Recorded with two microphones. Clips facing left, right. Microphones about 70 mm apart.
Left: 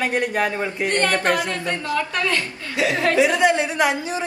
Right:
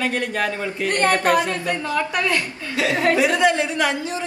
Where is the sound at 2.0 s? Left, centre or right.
Centre.